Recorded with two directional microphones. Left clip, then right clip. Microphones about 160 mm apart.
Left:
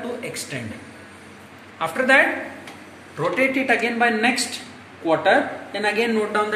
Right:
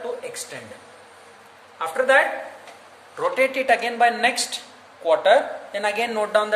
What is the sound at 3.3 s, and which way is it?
Speech, 90° right.